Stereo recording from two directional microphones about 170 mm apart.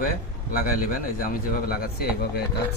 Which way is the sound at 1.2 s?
55° left (ahead or behind).